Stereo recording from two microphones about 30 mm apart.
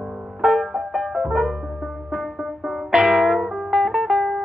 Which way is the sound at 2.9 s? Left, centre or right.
Right.